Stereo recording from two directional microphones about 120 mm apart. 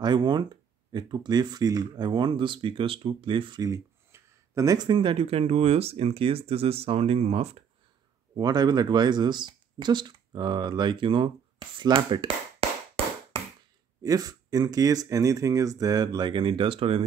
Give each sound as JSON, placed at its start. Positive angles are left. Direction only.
{"t": 0.0, "sound": "speech", "side_deg": -35}
{"t": 3.6, "sound": "speech", "side_deg": -25}
{"t": 8.4, "sound": "speech", "side_deg": -35}
{"t": 11.8, "sound": "tap", "side_deg": -40}
{"t": 14.0, "sound": "speech", "side_deg": -30}